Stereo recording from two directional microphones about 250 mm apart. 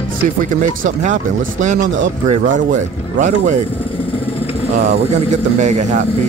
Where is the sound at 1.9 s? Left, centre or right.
Right.